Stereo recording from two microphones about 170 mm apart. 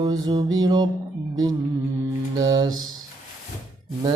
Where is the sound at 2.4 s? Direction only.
25° right (ahead or behind).